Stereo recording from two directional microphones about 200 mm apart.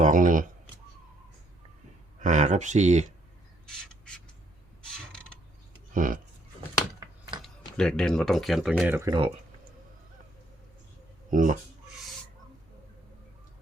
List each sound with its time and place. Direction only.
0.0 s speech: 40° right (ahead or behind)
2.1 s speech: 40° right (ahead or behind)
3.7 s bird: 5° left (ahead or behind)
5.1 s mechanisms: 5° left (ahead or behind)
5.9 s speech: 40° right (ahead or behind)
7.8 s speech: 5° left (ahead or behind)
9.0 s speech: 25° right (ahead or behind)
11.3 s speech: 40° right (ahead or behind)